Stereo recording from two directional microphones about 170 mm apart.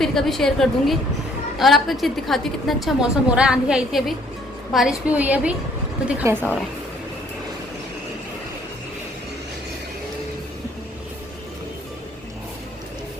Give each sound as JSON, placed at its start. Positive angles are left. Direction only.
{"t": 0.0, "sound": "a woman's voice", "side_deg": 0}